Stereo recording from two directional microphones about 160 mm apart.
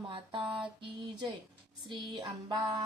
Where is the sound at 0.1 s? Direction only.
30° right (ahead or behind).